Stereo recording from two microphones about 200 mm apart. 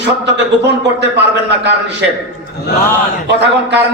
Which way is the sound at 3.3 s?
60° right (ahead or behind).